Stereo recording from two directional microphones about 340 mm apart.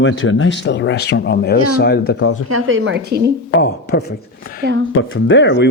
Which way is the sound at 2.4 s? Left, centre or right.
Right.